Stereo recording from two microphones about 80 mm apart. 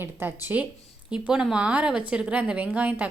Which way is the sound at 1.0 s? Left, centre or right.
Centre.